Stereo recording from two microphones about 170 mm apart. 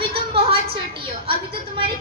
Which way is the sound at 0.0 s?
35° right (ahead or behind).